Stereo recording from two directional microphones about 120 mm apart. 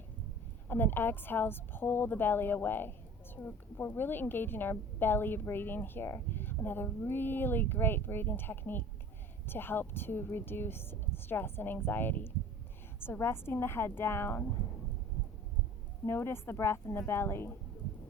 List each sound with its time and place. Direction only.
0.7 s a woman's voice: 15° left (ahead or behind)
16.0 s a woman's voice: 20° left (ahead or behind)